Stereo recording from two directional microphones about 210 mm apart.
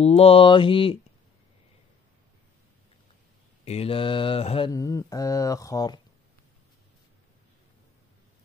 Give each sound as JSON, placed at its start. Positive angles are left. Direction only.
{"t": 0.0, "sound": "speech", "side_deg": 30}
{"t": 3.6, "sound": "speech", "side_deg": 30}
{"t": 4.7, "sound": "speech", "side_deg": 15}